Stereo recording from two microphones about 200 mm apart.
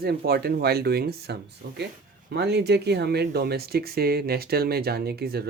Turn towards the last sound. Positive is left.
turn(degrees=-50)  # may be behind; listen again after turning